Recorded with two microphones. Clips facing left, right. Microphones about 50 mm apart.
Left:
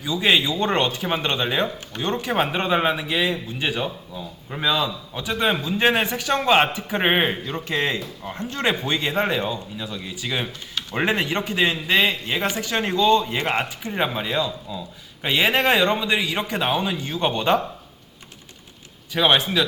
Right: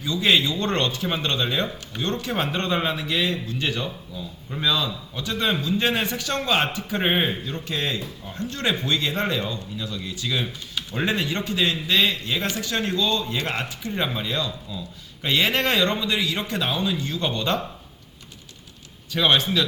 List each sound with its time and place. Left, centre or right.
0.0 s a man's voice: centre
3.8 s a man's voice: left
8.4 s a man's voice: left
19.1 s a man's voice: centre